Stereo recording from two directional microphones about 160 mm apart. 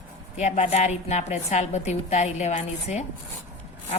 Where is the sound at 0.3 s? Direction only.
45° left (ahead or behind).